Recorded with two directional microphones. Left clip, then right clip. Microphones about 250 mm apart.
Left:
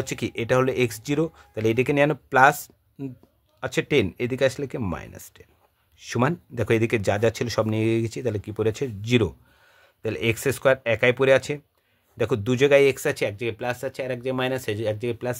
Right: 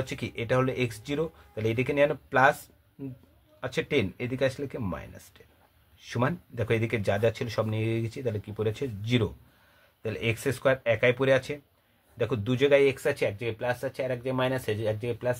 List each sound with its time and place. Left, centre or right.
0.0 s speech: left
3.6 s speech: left